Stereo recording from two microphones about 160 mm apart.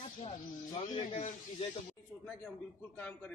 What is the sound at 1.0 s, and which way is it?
Speech, 45° left (ahead or behind).